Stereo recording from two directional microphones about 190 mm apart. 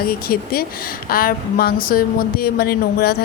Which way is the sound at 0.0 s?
50° left (ahead or behind).